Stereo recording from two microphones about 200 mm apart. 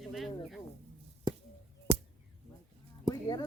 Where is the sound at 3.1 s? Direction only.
20° left (ahead or behind).